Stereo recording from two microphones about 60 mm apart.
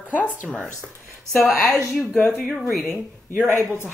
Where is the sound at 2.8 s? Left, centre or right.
Left.